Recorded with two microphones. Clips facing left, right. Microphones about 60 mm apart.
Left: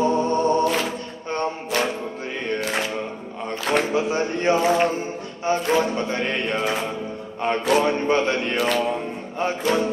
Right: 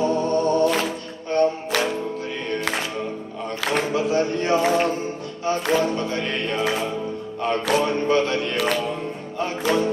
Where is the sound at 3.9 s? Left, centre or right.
Left.